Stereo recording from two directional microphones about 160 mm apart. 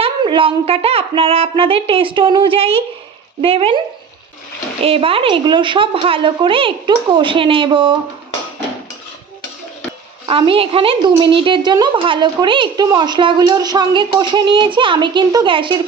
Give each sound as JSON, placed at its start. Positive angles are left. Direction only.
{"t": 0.0, "sound": "speech", "side_deg": -35}
{"t": 10.2, "sound": "speech", "side_deg": -35}